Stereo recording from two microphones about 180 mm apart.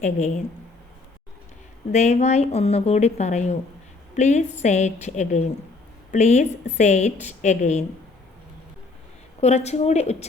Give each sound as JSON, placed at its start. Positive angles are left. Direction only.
{"t": 0.0, "sound": "a woman's voice", "side_deg": 40}
{"t": 1.9, "sound": "a woman's voice", "side_deg": 40}
{"t": 9.4, "sound": "a woman's voice", "side_deg": 35}